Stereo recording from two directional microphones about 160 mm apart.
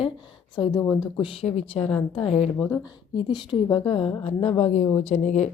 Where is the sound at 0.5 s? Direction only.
25° left (ahead or behind); by 5.5 s 45° left (ahead or behind).